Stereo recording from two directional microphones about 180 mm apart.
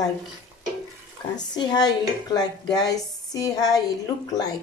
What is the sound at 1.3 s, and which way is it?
Speech, 20° left (ahead or behind).